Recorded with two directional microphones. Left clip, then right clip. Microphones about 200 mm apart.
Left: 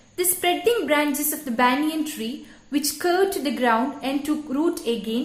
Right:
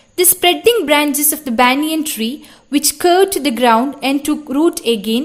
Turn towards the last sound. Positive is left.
turn(degrees=-50)  # may be behind; listen again after turning